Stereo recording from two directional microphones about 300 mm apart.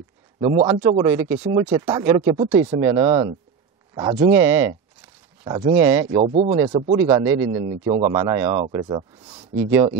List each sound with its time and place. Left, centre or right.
0.4 s speech: centre
5.8 s speech: centre
6.2 s speech: right
7.3 s speech: right